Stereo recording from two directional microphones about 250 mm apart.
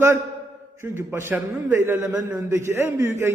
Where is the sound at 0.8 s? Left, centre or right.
Centre.